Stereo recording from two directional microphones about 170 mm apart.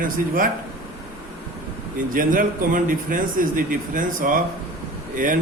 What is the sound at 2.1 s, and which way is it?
Speech, 55° right (ahead or behind).